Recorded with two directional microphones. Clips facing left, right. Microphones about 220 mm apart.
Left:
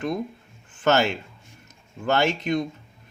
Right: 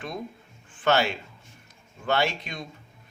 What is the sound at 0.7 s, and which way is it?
Speech, 45° left (ahead or behind).